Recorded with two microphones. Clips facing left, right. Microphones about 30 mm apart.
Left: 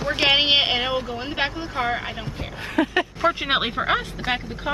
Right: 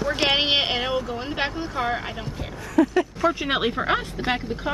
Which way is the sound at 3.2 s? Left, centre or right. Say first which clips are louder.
Left 3 dB; left.